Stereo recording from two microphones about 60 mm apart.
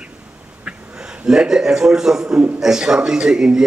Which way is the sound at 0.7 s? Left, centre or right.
Centre.